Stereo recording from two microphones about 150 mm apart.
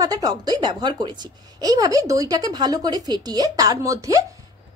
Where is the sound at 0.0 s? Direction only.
25° right (ahead or behind).